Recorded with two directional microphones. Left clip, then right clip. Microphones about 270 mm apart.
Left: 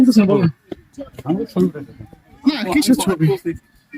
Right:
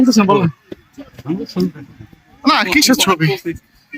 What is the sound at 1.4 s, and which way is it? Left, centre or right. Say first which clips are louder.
Speech: left 2 dB; left.